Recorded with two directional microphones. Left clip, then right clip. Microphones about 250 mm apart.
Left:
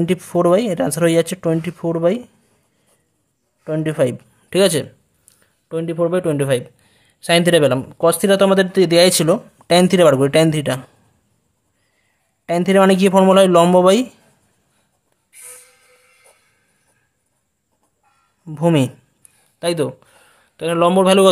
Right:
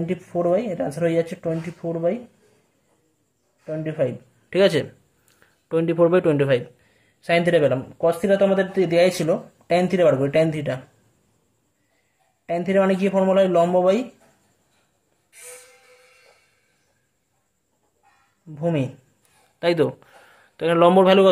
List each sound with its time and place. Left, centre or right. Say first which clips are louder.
0.0 s speech: left 7 dB; left
3.6 s speech: left 6 dB; left
12.4 s speech: left 6 dB; left
18.5 s speech: left 8 dB; left
19.6 s a man's voice: even; left